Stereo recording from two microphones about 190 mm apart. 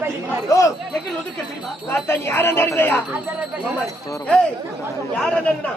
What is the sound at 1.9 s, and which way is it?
Speech, 15° left (ahead or behind).